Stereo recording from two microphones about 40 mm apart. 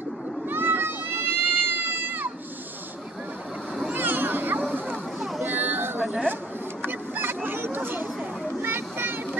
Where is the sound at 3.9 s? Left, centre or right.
Right.